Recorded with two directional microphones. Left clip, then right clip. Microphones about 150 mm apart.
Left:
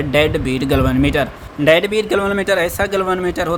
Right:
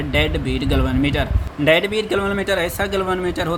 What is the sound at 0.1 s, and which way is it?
Speech, 40° left (ahead or behind).